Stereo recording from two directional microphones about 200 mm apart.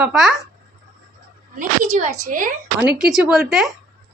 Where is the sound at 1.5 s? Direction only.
35° right (ahead or behind).